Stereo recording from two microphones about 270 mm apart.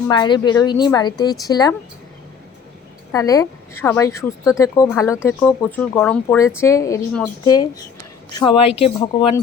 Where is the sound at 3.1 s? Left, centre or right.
Centre.